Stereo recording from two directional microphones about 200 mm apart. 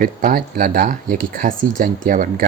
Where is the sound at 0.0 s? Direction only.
45° right (ahead or behind).